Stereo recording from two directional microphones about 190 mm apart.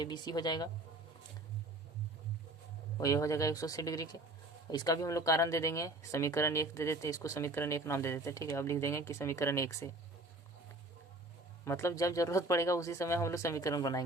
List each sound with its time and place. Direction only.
0.0 s a woman's voice: 20° left (ahead or behind)
3.0 s speech: 15° left (ahead or behind)
11.6 s speech: 15° left (ahead or behind)